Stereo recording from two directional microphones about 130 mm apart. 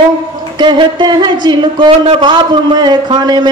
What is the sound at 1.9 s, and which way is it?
A man's voice, 45° right (ahead or behind).